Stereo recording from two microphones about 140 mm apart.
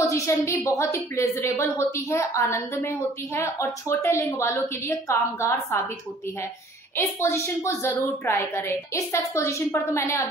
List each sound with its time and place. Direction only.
0.0 s a woman's voice: 20° left (ahead or behind)
7.0 s a woman's voice: 20° left (ahead or behind)